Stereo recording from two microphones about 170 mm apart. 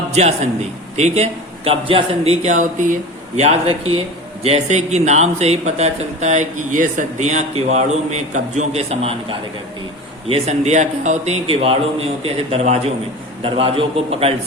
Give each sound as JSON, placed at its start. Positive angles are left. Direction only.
{"t": 0.1, "sound": "a man's voice", "side_deg": -40}
{"t": 10.2, "sound": "speech", "side_deg": -35}